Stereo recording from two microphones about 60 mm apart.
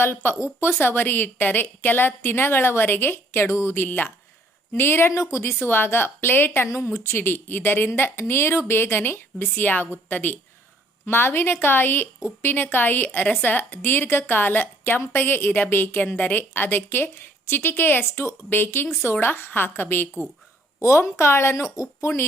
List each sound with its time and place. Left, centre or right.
0.0 s a woman's voice: left
0.3 s a woman's voice: left
3.8 s a woman's voice: left
5.1 s speech: left
5.4 s a woman's voice: left
6.7 s a woman's voice: left
9.9 s a woman's voice: left
18.0 s a woman's voice: left
18.5 s a woman's voice: left
20.7 s a woman's voice: left